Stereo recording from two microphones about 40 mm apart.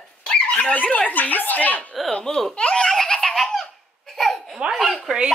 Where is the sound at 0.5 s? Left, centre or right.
Left.